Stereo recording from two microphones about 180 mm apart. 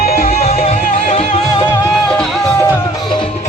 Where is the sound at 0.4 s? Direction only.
35° left (ahead or behind).